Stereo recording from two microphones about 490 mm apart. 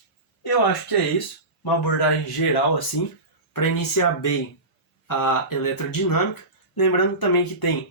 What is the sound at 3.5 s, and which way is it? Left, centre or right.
Speech, left.